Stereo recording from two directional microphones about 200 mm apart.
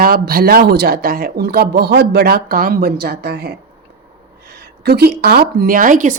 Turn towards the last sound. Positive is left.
turn(degrees=-40)  # may be behind; listen again after turning